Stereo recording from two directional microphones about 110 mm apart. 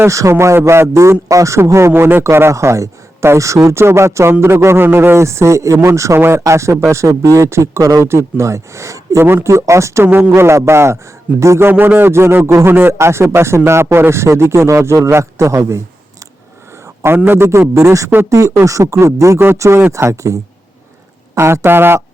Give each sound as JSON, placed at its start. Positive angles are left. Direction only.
{"t": 0.0, "sound": "speech", "side_deg": -30}
{"t": 17.0, "sound": "speech", "side_deg": -20}